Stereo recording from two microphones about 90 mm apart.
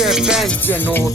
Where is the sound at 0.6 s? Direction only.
20° left (ahead or behind).